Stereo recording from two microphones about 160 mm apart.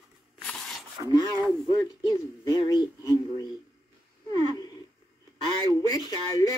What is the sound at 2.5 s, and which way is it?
Speech, 25° left (ahead or behind).